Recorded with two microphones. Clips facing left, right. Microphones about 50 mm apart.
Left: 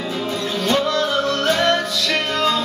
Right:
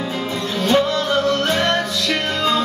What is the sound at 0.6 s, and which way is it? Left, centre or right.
Music, centre.